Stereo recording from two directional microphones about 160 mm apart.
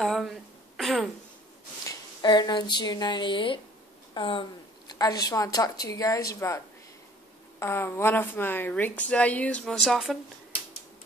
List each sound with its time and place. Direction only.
0.0 s a sound: centre (ahead or behind)
0.7 s throat clearing: centre (ahead or behind)
1.9 s a woman's voice: 25° left (ahead or behind); by 10.1 s centre (ahead or behind)